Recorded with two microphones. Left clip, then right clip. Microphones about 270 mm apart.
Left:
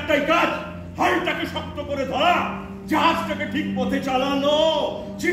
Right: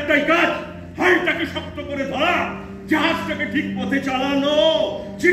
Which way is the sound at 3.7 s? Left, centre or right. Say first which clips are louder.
Left 3 dB; centre.